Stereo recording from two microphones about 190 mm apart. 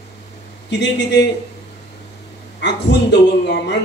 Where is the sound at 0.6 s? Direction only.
65° left (ahead or behind).